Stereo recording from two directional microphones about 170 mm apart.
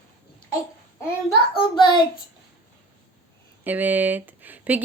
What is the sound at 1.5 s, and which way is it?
Speech, 30° left (ahead or behind).